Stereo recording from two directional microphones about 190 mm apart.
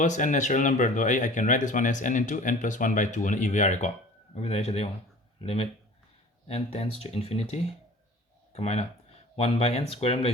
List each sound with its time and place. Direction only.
0.0 s speech: 40° left (ahead or behind)